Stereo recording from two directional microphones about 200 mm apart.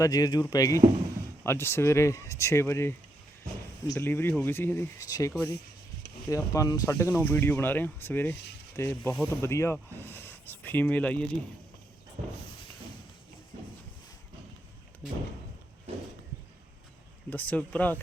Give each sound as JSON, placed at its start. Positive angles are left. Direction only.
{"t": 0.0, "sound": "speech", "side_deg": 20}
{"t": 5.5, "sound": "a sound", "side_deg": 55}
{"t": 6.2, "sound": "speech", "side_deg": 15}
{"t": 17.2, "sound": "speech", "side_deg": 10}